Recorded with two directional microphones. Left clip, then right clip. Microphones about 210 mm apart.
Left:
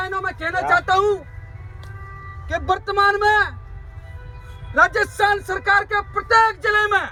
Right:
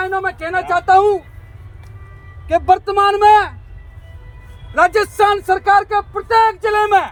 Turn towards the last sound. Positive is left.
turn(degrees=-20)  # may be behind; listen again after turning